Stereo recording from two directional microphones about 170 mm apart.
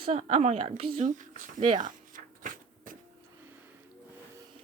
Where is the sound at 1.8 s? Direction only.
50° right (ahead or behind).